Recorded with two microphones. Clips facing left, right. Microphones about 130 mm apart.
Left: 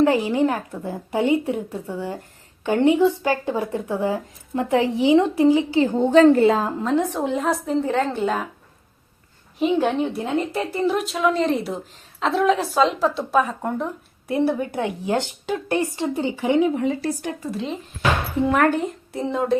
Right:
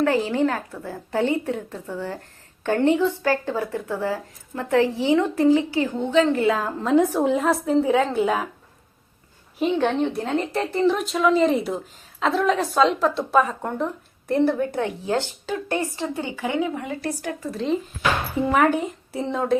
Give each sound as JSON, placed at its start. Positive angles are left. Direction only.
{"t": 0.0, "sound": "speech", "side_deg": 15}
{"t": 5.8, "sound": "a woman's voice", "side_deg": 30}
{"t": 6.1, "sound": "a woman's voice", "side_deg": 40}
{"t": 6.8, "sound": "a woman's voice", "side_deg": -5}
{"t": 9.6, "sound": "a woman's voice", "side_deg": 5}
{"t": 18.4, "sound": "a woman's voice", "side_deg": -5}